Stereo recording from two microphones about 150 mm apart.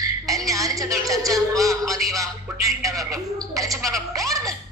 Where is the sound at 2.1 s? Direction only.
20° right (ahead or behind).